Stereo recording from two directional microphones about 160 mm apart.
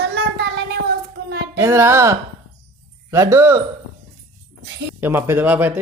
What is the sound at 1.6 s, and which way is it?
Speech, 15° right (ahead or behind).